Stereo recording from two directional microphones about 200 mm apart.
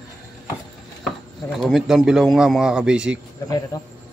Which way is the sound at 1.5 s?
Centre (ahead or behind).